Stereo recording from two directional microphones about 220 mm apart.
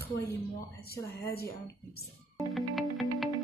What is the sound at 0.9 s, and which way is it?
Speech, 45° left (ahead or behind).